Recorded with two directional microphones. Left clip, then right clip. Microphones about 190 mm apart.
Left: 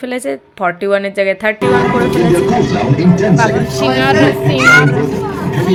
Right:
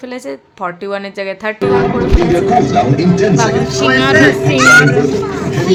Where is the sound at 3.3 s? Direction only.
Centre (ahead or behind).